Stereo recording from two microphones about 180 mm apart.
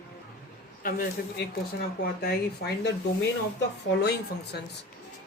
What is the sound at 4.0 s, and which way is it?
Speech, 65° left (ahead or behind).